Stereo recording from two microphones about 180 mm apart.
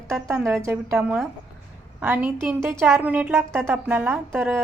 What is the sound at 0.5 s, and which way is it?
Speech, 15° right (ahead or behind).